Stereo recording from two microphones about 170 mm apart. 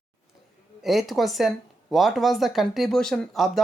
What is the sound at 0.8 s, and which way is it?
A man's voice, centre (ahead or behind).